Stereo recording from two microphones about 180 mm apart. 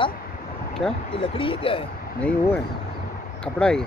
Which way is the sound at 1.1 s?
30° left (ahead or behind).